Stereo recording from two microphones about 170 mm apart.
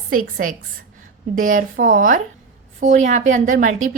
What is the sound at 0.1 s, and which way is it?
A woman's voice, 55° right (ahead or behind).